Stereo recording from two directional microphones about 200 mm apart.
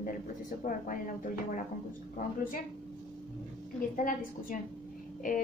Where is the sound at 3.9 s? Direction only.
40° left (ahead or behind).